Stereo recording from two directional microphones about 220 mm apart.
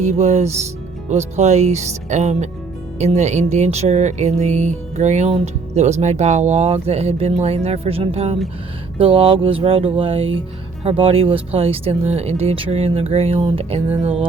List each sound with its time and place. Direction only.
0.0 s speech: 30° right (ahead or behind)